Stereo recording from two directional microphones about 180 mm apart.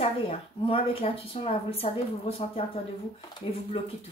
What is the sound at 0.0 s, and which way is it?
Speech, 30° left (ahead or behind).